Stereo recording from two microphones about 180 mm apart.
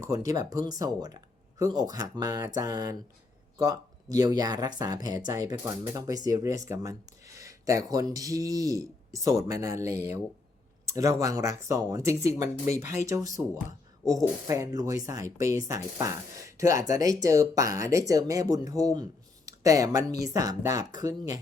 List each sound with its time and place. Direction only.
0.0 s speech: 20° right (ahead or behind)